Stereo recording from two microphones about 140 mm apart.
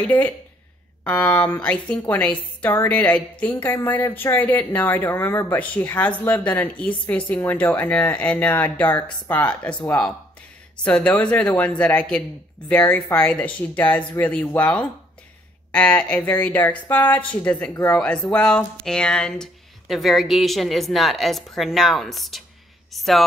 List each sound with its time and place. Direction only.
0.0 s speech: 10° left (ahead or behind)